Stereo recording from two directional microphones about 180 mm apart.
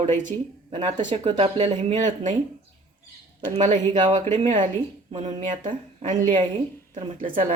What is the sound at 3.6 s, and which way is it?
Speech, 40° right (ahead or behind).